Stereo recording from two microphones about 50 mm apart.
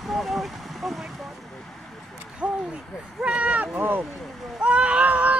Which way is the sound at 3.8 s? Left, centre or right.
Right.